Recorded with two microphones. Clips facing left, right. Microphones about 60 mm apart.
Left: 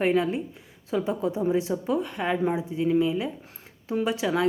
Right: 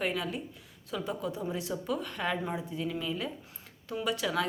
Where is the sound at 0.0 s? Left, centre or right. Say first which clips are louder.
Left 9 dB; left.